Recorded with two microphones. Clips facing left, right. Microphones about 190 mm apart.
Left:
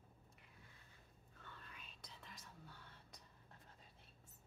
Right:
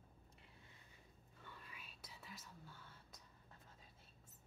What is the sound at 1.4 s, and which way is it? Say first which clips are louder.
Whispering: right 1 dB; 10° right (ahead or behind).